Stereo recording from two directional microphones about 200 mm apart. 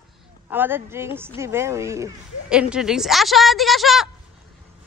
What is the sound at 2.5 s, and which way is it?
A woman's voice, 5° right (ahead or behind).